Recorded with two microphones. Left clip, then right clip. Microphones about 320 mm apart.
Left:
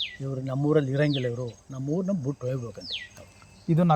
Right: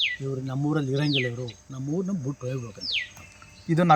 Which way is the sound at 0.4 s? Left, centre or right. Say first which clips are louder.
Left 6 dB; centre.